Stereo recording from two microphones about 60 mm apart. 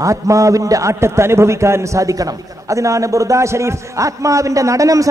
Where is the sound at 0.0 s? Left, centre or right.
Right.